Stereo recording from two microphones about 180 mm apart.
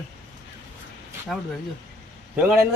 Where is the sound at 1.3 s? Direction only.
Centre (ahead or behind).